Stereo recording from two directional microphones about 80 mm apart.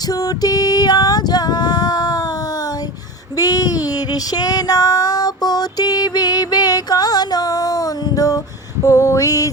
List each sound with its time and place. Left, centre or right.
0.1 s female singing: left
3.3 s female singing: left
8.8 s lullaby: left